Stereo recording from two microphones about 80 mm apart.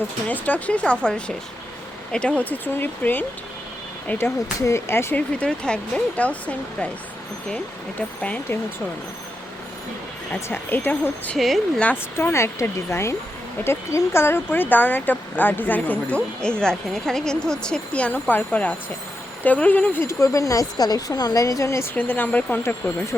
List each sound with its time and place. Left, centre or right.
0.3 s speech: left
4.6 s speech: left
5.1 s speech: centre
10.5 s speech: left
11.3 s speech: centre
12.1 s speech: left
20.1 s speech: left
21.9 s speech: left